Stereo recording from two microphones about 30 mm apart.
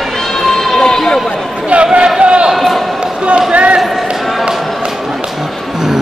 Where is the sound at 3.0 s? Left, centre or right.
Right.